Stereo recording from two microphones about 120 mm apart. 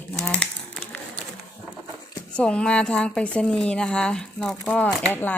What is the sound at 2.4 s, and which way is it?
Speech, 10° left (ahead or behind).